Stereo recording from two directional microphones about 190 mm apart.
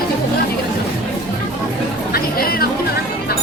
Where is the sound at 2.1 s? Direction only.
50° left (ahead or behind).